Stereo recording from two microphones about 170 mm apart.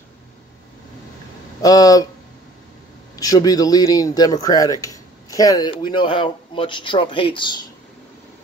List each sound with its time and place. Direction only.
1.6 s speech: 20° left (ahead or behind)
3.2 s speech: 20° left (ahead or behind)